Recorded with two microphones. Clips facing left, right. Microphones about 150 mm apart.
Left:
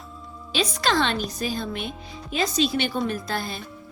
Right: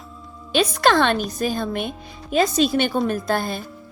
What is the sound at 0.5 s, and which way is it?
A woman's voice, 55° right (ahead or behind).